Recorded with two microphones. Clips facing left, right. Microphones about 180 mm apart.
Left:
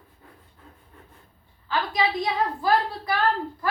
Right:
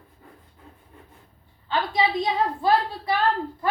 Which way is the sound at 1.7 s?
25° right (ahead or behind).